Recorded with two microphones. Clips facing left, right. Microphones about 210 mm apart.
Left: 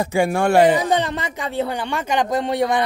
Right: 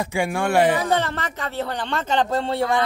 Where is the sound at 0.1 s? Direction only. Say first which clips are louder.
Left 5 dB; 40° left (ahead or behind).